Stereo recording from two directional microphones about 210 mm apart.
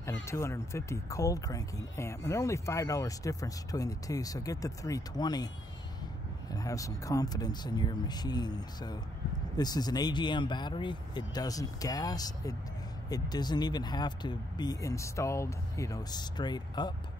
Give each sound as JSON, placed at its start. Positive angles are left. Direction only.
{"t": 0.2, "sound": "speech", "side_deg": 15}
{"t": 6.5, "sound": "speech", "side_deg": 15}